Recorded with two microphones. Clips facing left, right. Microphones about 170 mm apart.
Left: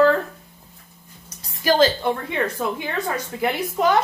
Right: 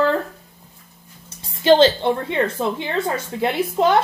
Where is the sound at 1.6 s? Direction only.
25° right (ahead or behind).